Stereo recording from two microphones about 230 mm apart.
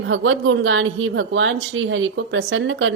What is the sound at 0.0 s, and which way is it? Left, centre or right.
Speech, right.